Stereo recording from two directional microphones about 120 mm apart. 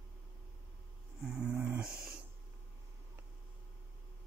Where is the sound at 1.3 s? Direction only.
10° right (ahead or behind).